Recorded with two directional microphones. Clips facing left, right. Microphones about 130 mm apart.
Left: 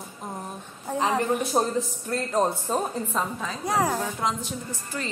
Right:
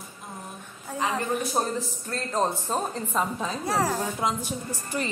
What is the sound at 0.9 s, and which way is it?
Speech, 25° left (ahead or behind).